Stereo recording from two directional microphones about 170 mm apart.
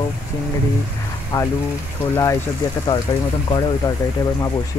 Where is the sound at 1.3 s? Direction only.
20° left (ahead or behind).